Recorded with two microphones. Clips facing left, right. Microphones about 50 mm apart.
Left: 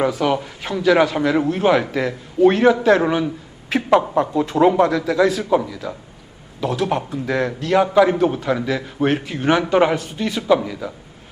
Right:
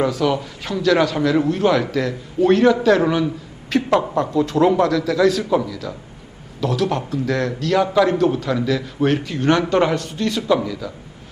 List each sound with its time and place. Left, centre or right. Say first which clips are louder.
0.0 s a man's voice: even; centre
5.6 s a man's voice: even; left